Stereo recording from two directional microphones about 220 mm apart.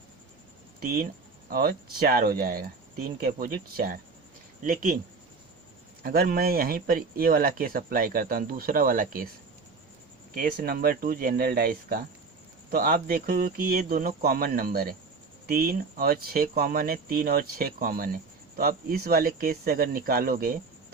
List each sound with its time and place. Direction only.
1.5 s speech: 45° right (ahead or behind)
6.0 s speech: 45° right (ahead or behind)
10.3 s speech: 40° right (ahead or behind)